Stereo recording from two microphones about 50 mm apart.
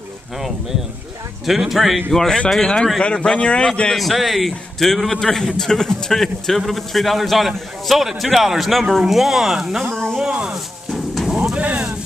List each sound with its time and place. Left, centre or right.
1.4 s a man's voice: centre
2.1 s a man's voice: centre
3.9 s a man's voice: centre
10.1 s a sound: centre
10.9 s a sound: centre
11.5 s speech: right